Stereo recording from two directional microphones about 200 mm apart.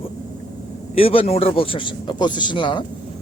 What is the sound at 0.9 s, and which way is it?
Speech, 30° left (ahead or behind).